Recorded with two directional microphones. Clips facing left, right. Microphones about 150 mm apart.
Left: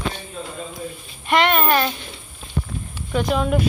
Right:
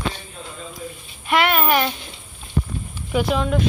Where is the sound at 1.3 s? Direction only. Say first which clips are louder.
Left 1 dB; 5° right (ahead or behind).